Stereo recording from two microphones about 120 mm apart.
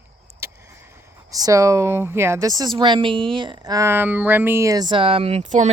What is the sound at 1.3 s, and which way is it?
Speech, 30° right (ahead or behind).